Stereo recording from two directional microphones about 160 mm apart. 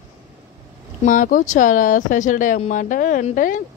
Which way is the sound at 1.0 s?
55° left (ahead or behind).